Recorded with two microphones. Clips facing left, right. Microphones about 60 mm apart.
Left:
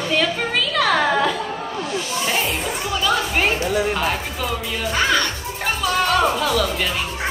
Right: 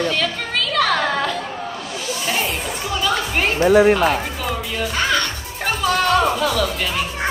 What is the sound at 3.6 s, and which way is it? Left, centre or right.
Speech, right.